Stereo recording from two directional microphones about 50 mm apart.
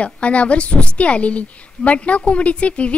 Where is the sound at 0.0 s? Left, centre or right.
Left.